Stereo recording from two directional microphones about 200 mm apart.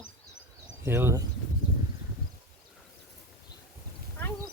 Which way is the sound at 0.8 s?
10° right (ahead or behind).